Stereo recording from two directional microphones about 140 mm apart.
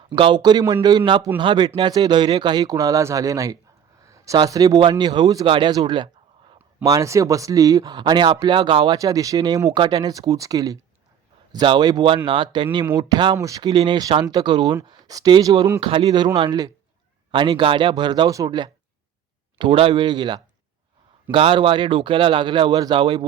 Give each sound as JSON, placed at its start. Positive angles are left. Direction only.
{"t": 0.2, "sound": "speech", "side_deg": -35}
{"t": 6.8, "sound": "speech", "side_deg": -25}
{"t": 9.0, "sound": "speech", "side_deg": -25}
{"t": 15.8, "sound": "speech", "side_deg": -40}